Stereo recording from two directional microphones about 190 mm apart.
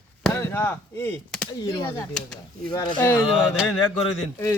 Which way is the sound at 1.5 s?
20° left (ahead or behind).